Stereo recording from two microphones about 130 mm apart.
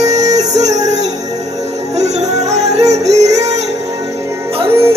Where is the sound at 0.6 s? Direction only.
25° right (ahead or behind).